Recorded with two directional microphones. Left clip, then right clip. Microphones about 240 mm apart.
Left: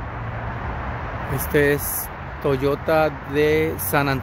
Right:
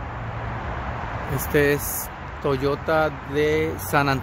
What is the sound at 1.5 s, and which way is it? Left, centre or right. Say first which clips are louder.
Speech: left 1 dB; centre.